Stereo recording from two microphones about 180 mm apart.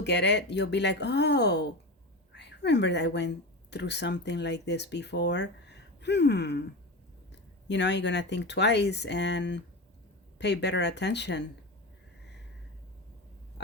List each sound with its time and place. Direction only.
0.0 s speech: 75° left (ahead or behind)
7.7 s speech: 75° left (ahead or behind)